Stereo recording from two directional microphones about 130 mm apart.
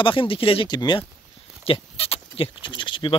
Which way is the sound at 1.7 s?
50° left (ahead or behind).